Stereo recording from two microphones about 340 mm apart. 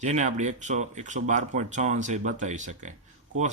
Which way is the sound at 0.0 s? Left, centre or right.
Right.